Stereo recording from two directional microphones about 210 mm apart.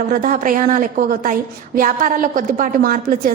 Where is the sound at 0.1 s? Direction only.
40° right (ahead or behind).